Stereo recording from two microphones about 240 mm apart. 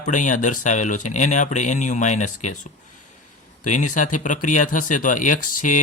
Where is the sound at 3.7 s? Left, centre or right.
Left.